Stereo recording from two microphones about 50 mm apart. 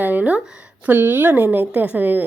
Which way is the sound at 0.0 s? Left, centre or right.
Right.